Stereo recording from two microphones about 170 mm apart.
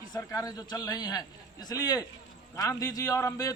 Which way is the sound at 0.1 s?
20° left (ahead or behind).